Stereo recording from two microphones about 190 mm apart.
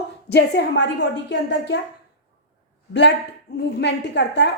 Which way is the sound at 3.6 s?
60° left (ahead or behind).